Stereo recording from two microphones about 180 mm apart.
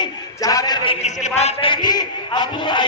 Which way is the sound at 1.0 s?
40° left (ahead or behind).